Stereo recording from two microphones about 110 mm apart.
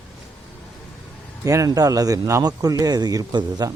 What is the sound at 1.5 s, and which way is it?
Speech, 30° right (ahead or behind).